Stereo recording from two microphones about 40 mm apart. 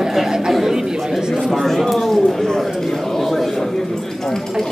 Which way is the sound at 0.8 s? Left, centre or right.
Centre.